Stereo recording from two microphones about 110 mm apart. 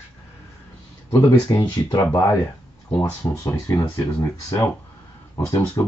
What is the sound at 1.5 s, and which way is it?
Speech, 35° left (ahead or behind).